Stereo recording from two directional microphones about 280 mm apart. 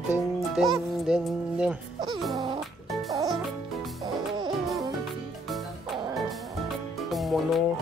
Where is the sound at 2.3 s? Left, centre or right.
Centre.